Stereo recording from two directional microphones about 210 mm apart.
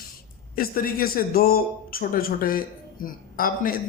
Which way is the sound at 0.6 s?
45° left (ahead or behind).